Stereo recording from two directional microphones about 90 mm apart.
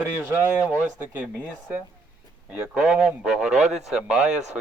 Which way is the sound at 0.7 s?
20° right (ahead or behind).